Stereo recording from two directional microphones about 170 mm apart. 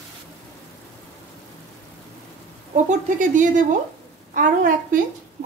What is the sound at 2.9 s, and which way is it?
A woman's voice, 50° right (ahead or behind).